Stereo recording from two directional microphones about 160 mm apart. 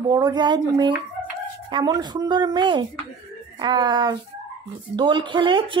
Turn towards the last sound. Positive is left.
turn(degrees=-30)  # may be behind; listen again after turning